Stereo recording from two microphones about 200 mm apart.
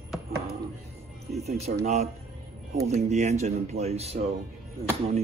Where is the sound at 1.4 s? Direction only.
35° right (ahead or behind).